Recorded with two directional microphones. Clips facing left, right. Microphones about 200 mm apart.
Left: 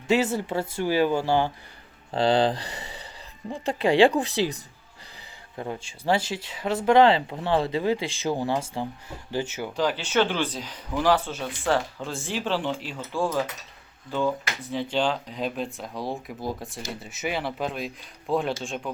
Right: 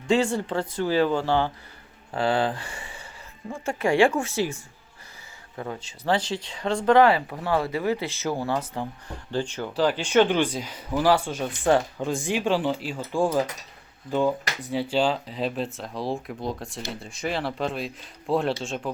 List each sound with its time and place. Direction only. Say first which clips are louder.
0.1 s speech: right 1 dB; 5° left (ahead or behind)
2.1 s speech: left 3 dB; 35° left (ahead or behind)
3.8 s speech: left 2 dB; 15° left (ahead or behind)
6.1 s speech: even; 10° left (ahead or behind)
6.9 s speech: even; 25° left (ahead or behind); by 9.7 s 5° left (ahead or behind)
9.7 s speech: right 4 dB; 10° right (ahead or behind)